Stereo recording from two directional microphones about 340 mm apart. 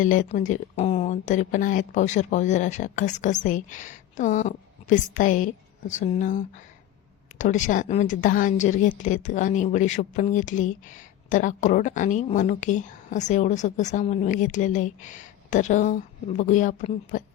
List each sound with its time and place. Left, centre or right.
0.0 s a woman's voice: left